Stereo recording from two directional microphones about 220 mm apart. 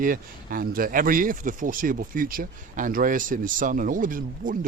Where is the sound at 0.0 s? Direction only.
40° right (ahead or behind).